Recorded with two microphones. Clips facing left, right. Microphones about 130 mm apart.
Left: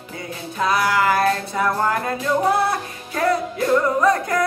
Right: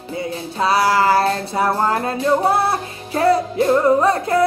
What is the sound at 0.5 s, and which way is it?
Music, 30° right (ahead or behind).